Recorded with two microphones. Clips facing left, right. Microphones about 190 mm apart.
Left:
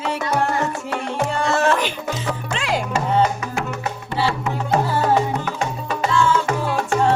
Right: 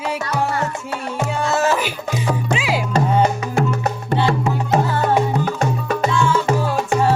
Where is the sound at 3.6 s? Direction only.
40° right (ahead or behind).